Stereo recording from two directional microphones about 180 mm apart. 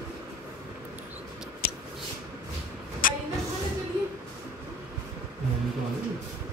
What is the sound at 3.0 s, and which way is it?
Vehicle, 50° left (ahead or behind).